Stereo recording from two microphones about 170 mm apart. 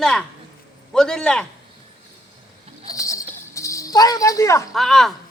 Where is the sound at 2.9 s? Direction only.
20° left (ahead or behind).